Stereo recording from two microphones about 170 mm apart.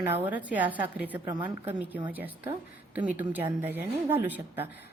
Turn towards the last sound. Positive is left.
turn(degrees=-10)  # may be behind; listen again after turning